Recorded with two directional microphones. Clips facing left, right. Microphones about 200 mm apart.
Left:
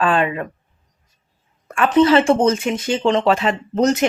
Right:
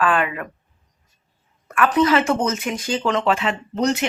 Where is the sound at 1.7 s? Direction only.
25° left (ahead or behind); by 4.0 s 45° left (ahead or behind).